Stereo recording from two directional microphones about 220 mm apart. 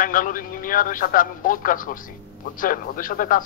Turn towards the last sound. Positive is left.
turn(degrees=40)  # may be behind; listen again after turning